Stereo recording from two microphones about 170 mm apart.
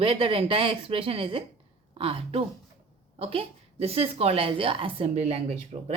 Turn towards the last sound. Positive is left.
turn(degrees=-35)  # may be behind; listen again after turning